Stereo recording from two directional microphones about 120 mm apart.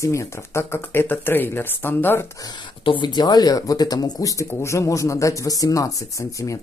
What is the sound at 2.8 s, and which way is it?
Speech, 45° left (ahead or behind).